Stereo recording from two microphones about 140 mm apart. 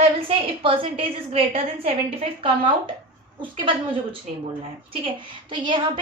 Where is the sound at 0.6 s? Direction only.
40° right (ahead or behind).